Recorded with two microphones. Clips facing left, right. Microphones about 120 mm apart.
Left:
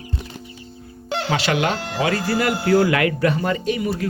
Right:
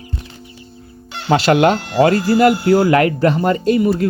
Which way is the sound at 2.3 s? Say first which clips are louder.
Right 4 dB; 25° right (ahead or behind).